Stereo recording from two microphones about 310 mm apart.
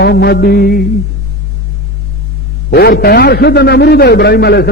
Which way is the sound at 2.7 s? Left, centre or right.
Left.